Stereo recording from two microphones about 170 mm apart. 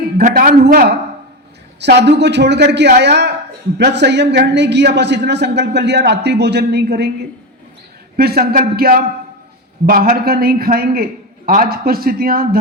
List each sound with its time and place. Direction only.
0.2 s a man's voice: 55° right (ahead or behind)
1.8 s a man's voice: 85° right; by 12.5 s 60° right (ahead or behind)